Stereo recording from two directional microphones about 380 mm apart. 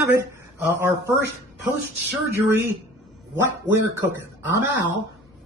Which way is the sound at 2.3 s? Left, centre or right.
Centre.